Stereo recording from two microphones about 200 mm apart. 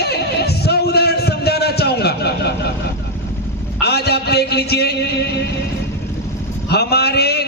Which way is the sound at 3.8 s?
55° left (ahead or behind).